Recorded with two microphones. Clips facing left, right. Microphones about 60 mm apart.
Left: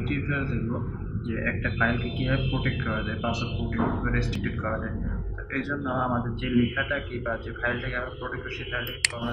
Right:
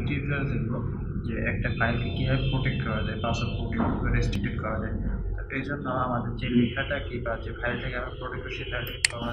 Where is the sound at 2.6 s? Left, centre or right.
Left.